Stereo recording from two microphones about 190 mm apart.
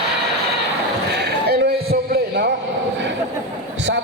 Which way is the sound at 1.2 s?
60° right (ahead or behind).